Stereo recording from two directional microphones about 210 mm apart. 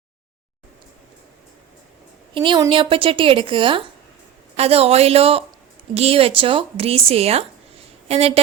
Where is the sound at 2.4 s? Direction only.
20° right (ahead or behind).